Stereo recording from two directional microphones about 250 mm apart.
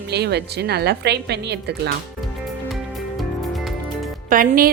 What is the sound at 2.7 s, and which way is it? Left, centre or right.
Music, centre.